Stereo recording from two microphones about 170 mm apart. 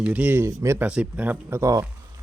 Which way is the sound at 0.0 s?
10° right (ahead or behind).